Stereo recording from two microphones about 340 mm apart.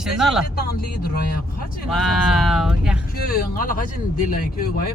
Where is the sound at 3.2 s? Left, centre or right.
Left.